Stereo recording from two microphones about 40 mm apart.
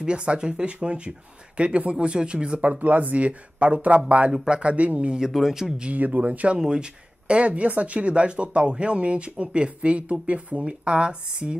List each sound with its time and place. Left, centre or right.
0.0 s speech: right
5.3 s speech: centre
5.9 s speech: right
6.6 s speech: right